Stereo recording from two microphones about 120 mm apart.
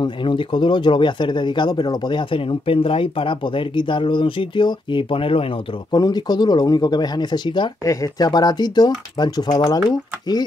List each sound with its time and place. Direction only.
0.0 s speech: 45° left (ahead or behind)
5.9 s speech: 35° left (ahead or behind)
7.8 s speech: 30° left (ahead or behind)